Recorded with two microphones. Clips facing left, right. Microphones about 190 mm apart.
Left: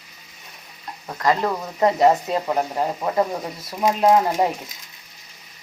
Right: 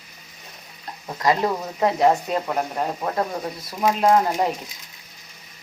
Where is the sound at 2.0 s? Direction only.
5° left (ahead or behind).